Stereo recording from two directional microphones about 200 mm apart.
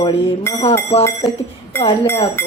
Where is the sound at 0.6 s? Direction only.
30° left (ahead or behind).